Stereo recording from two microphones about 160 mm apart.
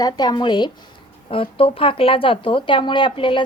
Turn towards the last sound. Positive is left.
turn(degrees=30)  # may be behind; listen again after turning